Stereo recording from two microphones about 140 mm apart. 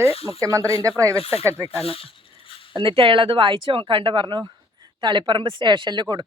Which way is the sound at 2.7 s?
40° right (ahead or behind).